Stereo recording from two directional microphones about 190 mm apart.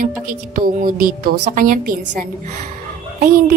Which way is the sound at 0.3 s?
45° right (ahead or behind).